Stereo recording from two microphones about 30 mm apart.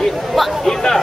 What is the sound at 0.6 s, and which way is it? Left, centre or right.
Speech, centre.